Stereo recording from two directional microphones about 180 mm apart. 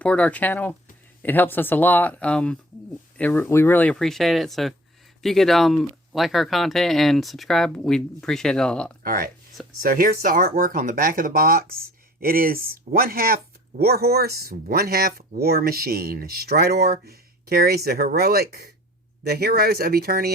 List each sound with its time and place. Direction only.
0.0 s speech: 5° left (ahead or behind)
9.0 s speech: 55° right (ahead or behind)